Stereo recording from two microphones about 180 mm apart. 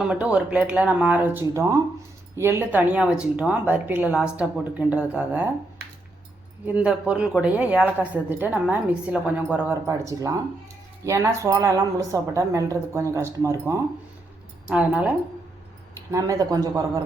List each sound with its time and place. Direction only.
0.0 s a woman's voice: 5° right (ahead or behind)
6.7 s a woman's voice: 5° right (ahead or behind)
16.1 s speech: 20° right (ahead or behind)